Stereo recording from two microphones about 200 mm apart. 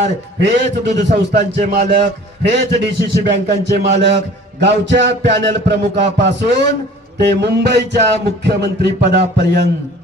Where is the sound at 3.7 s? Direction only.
60° right (ahead or behind).